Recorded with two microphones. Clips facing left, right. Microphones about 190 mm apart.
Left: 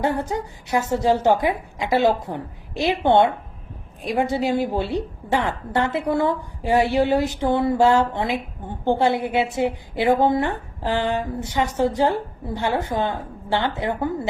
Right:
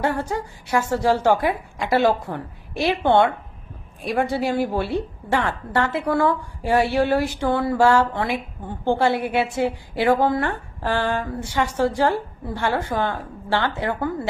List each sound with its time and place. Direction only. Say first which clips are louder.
0.0 s a woman's voice: left 1 dB; 20° left (ahead or behind)